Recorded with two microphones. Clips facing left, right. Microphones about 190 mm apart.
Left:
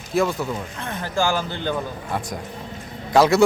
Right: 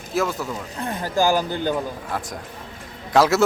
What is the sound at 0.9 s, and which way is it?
Speech, 15° right (ahead or behind).